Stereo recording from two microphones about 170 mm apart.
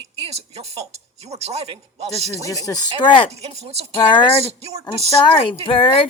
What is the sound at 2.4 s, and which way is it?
Speech, 20° left (ahead or behind).